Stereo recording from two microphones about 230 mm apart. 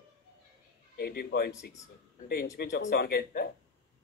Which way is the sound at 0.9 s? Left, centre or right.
Left.